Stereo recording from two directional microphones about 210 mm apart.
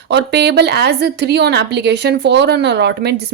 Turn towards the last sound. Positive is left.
turn(degrees=-50)  # may be behind; listen again after turning